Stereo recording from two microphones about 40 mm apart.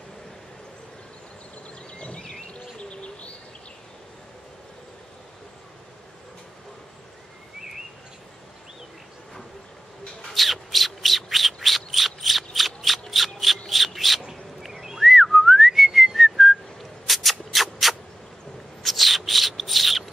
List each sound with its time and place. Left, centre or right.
2.0 s vehicle: left
2.8 s bird: left
10.3 s bird: centre
13.1 s a sound: centre
14.6 s whistling: centre
17.1 s shuffle: centre
18.8 s bird: centre